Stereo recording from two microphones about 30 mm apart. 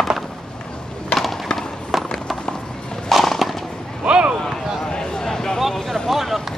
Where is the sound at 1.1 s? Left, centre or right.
Left.